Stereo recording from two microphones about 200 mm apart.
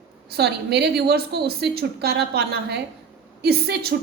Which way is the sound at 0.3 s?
55° right (ahead or behind).